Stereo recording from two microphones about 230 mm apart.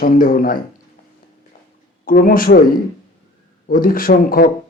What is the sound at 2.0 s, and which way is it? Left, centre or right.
Speech, left.